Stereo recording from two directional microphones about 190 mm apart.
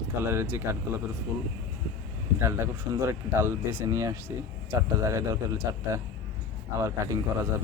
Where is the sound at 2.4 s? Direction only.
15° right (ahead or behind).